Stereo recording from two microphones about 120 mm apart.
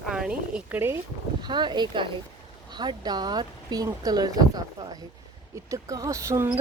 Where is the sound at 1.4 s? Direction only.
40° right (ahead or behind).